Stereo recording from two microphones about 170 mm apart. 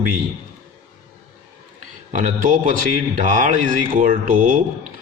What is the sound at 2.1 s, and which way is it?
A man's voice, 50° right (ahead or behind).